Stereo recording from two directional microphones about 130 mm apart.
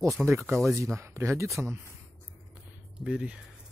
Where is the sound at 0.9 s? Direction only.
20° right (ahead or behind).